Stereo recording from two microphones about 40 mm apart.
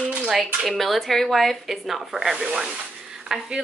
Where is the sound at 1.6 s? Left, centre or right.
Centre.